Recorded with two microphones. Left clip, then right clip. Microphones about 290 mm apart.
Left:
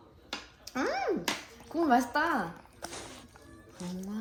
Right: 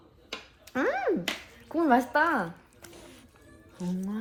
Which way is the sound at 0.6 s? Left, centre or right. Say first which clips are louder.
Right 4 dB; right.